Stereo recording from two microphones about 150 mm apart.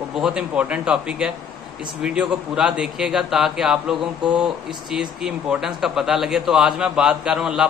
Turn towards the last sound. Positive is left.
turn(degrees=-5)  # may be behind; listen again after turning